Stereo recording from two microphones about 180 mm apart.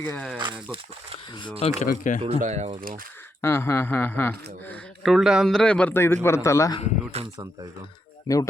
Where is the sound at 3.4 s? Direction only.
15° left (ahead or behind).